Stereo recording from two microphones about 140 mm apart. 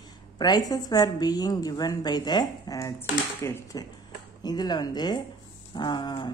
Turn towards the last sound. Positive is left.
turn(degrees=30)  # may be behind; listen again after turning